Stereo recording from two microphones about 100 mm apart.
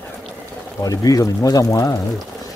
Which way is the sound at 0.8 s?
35° left (ahead or behind).